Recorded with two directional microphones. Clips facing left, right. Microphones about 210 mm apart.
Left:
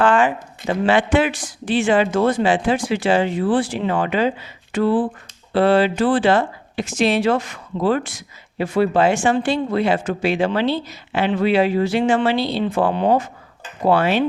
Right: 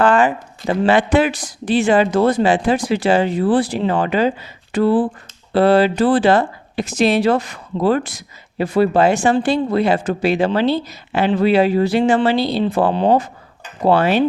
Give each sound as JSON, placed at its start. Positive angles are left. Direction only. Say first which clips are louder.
{"t": 0.0, "sound": "speech", "louder": "right 2 dB", "side_deg": -40}